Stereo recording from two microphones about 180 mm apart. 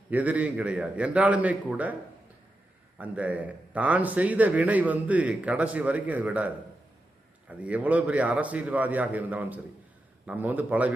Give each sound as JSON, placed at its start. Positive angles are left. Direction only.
{"t": 0.1, "sound": "a man's voice", "side_deg": -10}
{"t": 3.0, "sound": "a man's voice", "side_deg": -10}